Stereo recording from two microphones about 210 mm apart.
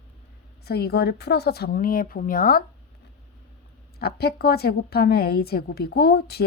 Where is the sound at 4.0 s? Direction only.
50° left (ahead or behind).